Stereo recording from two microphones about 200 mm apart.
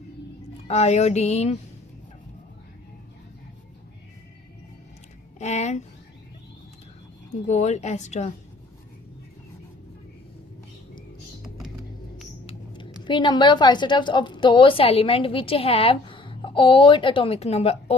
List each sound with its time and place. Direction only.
0.7 s a woman's voice: 35° left (ahead or behind)
5.4 s speech: 35° left (ahead or behind)
7.4 s a woman's voice: 35° left (ahead or behind)
12.5 s speech: 25° left (ahead or behind)